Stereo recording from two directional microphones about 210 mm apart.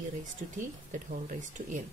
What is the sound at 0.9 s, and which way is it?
Speech, 35° right (ahead or behind).